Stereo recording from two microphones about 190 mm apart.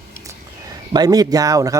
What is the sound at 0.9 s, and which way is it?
Speech, 20° right (ahead or behind).